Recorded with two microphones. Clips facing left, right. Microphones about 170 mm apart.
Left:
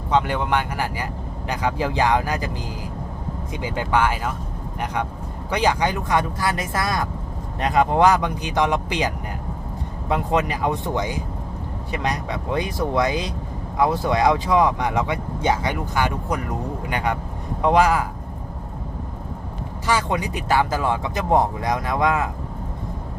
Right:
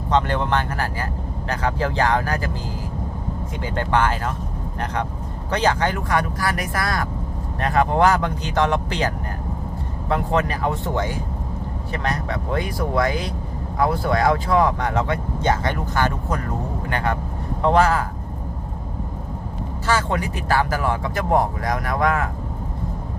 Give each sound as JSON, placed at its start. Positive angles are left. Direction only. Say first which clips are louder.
{"t": 0.1, "sound": "speech", "louder": "even", "side_deg": 10}
{"t": 3.6, "sound": "speech", "louder": "even", "side_deg": 10}
{"t": 5.5, "sound": "speech", "louder": "even", "side_deg": 10}
{"t": 19.9, "sound": "speech", "louder": "even", "side_deg": 15}